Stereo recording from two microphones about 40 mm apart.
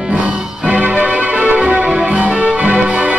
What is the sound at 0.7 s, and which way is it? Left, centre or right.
Music, right.